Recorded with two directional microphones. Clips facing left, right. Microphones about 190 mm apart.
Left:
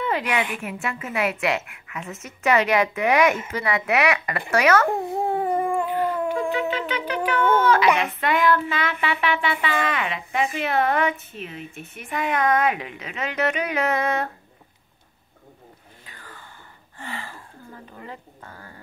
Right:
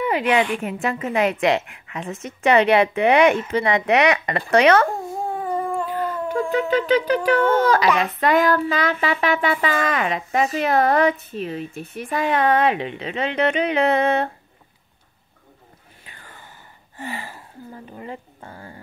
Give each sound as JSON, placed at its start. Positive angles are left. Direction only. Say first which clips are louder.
{"t": 0.2, "sound": "speech", "louder": "right 6 dB", "side_deg": -25}
{"t": 5.1, "sound": "a sound", "louder": "left 2 dB", "side_deg": 20}
{"t": 6.5, "sound": "speech", "louder": "right 7 dB", "side_deg": -40}
{"t": 17.0, "sound": "gasp", "louder": "right 4 dB", "side_deg": -20}
{"t": 17.9, "sound": "speech", "louder": "right 5 dB", "side_deg": -20}